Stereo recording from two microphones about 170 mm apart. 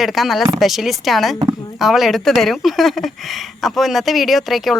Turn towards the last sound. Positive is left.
turn(degrees=0)  # may be behind; listen again after turning